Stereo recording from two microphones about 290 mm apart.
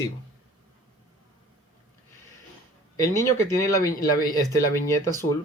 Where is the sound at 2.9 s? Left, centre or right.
Centre.